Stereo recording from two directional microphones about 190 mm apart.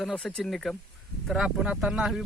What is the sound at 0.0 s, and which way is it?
Speech, 5° left (ahead or behind).